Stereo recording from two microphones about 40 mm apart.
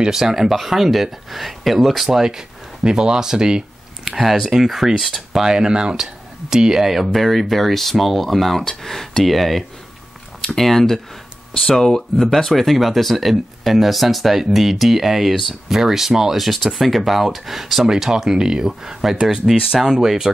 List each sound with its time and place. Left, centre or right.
0.0 s speech: centre
2.0 s speech: centre
5.4 s speech: centre